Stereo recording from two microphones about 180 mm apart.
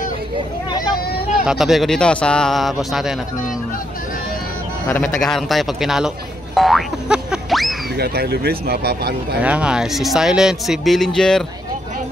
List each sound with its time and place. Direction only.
1.4 s speech: 5° right (ahead or behind)
4.8 s speech: 10° left (ahead or behind)
8.0 s speech: 60° right (ahead or behind)
9.4 s speech: 5° right (ahead or behind)